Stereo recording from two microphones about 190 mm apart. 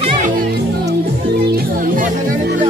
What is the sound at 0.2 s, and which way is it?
Music, 55° right (ahead or behind).